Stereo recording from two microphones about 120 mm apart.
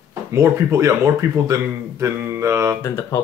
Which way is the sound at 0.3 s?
25° right (ahead or behind).